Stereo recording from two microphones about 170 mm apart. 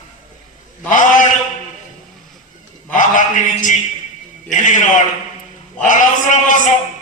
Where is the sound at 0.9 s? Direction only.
50° left (ahead or behind).